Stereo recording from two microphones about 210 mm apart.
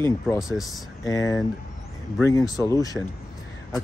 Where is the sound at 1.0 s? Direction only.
15° left (ahead or behind).